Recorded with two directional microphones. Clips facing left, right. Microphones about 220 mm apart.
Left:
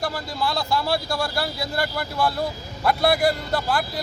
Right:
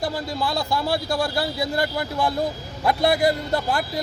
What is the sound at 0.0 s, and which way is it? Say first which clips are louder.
Speech: right 1 dB; 20° right (ahead or behind).